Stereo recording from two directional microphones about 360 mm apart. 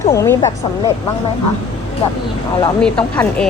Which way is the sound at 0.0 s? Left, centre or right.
Centre.